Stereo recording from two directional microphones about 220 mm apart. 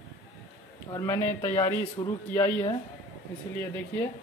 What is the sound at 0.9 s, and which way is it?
Speech, 15° left (ahead or behind).